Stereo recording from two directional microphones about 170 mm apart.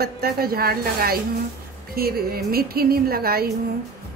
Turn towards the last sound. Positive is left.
turn(degrees=-65)  # may be behind; listen again after turning